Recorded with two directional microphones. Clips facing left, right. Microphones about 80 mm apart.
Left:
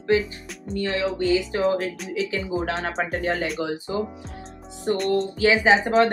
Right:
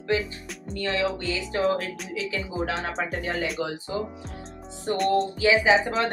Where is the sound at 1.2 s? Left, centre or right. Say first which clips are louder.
Left 5 dB; left.